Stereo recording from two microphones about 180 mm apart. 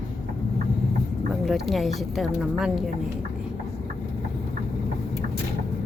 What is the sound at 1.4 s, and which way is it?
Speech, centre (ahead or behind).